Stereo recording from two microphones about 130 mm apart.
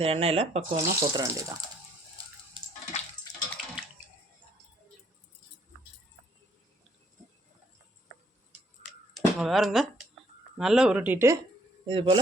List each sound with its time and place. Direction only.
0.0 s speech: 50° right (ahead or behind)
0.8 s speech: 25° right (ahead or behind)
8.9 s a sound: 5° right (ahead or behind)
10.6 s speech: 5° right (ahead or behind)
11.9 s speech: 40° right (ahead or behind)